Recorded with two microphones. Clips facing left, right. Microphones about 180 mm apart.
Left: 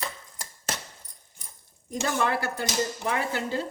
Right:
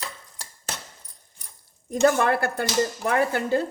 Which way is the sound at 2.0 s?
55° right (ahead or behind).